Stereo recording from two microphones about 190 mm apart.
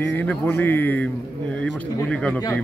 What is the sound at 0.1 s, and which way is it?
A man's voice, 10° left (ahead or behind).